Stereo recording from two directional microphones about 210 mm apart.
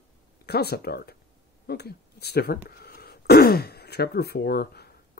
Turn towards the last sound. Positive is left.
turn(degrees=50)  # may be behind; listen again after turning